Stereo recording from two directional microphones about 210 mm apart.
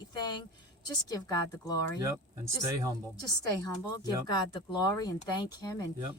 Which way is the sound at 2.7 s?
15° right (ahead or behind).